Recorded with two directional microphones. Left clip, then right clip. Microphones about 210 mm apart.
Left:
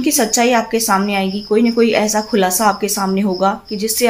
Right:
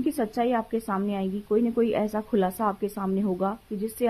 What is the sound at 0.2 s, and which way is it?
A woman's voice, 40° right (ahead or behind).